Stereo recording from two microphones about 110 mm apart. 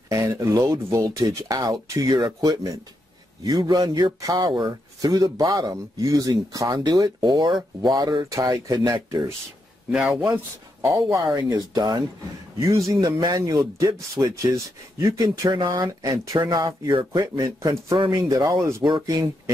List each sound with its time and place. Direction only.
0.1 s speech: 30° right (ahead or behind)
9.8 s speech: 10° right (ahead or behind)
10.8 s speech: 30° right (ahead or behind)